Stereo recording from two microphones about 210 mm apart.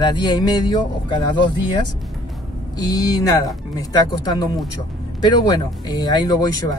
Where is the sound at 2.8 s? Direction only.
15° left (ahead or behind).